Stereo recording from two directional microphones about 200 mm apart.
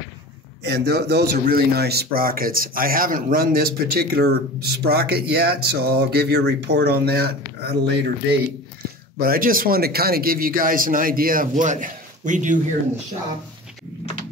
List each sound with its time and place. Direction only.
0.7 s speech: 55° right (ahead or behind)
9.2 s speech: 45° right (ahead or behind)